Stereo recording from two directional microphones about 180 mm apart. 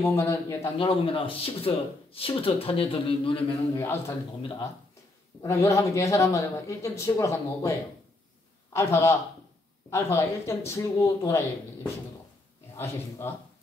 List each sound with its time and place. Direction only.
0.0 s speech: 15° left (ahead or behind)
0.7 s speech: 30° left (ahead or behind)
3.7 s speech: 15° left (ahead or behind)
5.4 s speech: 15° left (ahead or behind)
8.7 s speech: 15° left (ahead or behind)